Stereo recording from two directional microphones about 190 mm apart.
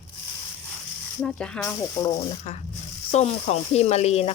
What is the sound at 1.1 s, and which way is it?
Frying, 5° left (ahead or behind).